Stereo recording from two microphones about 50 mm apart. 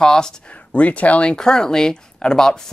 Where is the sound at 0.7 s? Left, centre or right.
Left; by 2.6 s centre.